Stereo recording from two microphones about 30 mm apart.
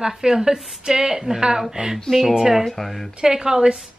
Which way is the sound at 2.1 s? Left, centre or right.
Centre.